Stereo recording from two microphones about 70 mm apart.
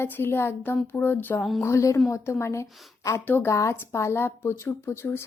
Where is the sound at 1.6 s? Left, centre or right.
Left.